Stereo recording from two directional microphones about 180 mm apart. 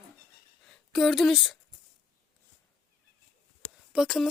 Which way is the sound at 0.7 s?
Centre (ahead or behind).